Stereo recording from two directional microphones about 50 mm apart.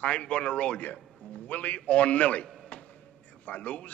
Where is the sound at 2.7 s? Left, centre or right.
Left.